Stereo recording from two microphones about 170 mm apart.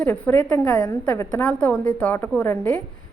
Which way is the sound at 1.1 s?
10° left (ahead or behind).